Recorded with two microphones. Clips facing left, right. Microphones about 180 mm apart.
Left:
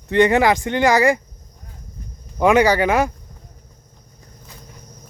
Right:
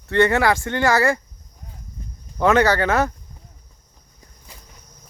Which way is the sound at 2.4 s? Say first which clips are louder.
Left 2 dB; 15° left (ahead or behind).